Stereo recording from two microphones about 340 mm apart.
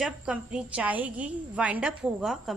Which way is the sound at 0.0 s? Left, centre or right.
Centre.